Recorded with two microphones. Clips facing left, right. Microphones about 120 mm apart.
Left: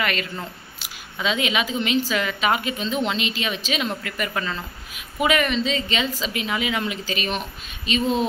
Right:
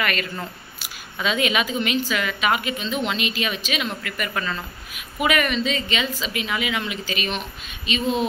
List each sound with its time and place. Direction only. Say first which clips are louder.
0.0 s speech: even; 25° left (ahead or behind)